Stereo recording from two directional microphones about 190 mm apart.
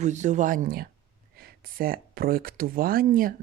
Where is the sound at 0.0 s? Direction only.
40° right (ahead or behind).